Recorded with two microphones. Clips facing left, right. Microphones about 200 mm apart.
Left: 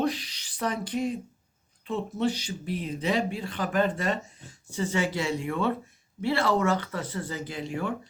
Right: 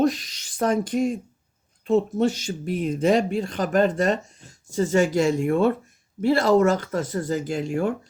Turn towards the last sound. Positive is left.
turn(degrees=-45)  # may be behind; listen again after turning